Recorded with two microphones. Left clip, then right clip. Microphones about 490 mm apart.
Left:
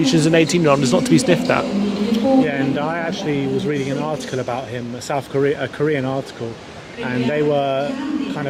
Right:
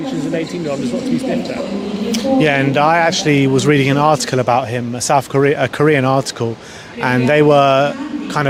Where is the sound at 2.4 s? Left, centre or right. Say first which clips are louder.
Right 8 dB; right.